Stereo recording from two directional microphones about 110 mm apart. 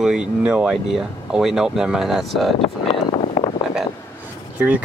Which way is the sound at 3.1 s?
55° left (ahead or behind).